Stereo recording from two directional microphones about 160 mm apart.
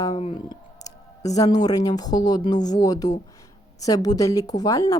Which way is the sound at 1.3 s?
20° left (ahead or behind).